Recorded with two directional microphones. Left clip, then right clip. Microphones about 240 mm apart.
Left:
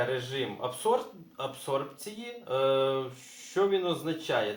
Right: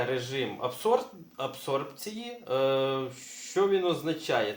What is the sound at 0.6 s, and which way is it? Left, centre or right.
Speech, right.